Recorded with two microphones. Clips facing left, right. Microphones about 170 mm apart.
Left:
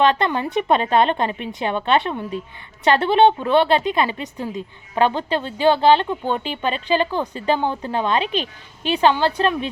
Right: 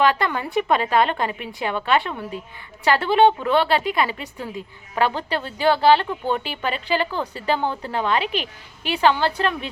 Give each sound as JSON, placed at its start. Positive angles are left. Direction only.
{"t": 0.0, "sound": "a woman's voice", "side_deg": 25}